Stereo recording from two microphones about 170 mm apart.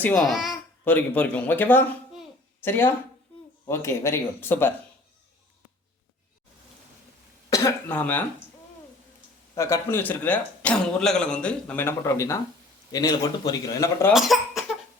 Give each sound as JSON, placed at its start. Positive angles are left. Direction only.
{"t": 0.3, "sound": "a child's voice", "side_deg": 0}
{"t": 7.5, "sound": "a man's voice", "side_deg": 15}
{"t": 9.6, "sound": "a man's voice", "side_deg": 15}
{"t": 14.1, "sound": "cough", "side_deg": 0}